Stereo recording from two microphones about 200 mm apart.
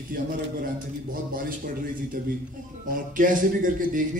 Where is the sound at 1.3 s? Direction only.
45° right (ahead or behind).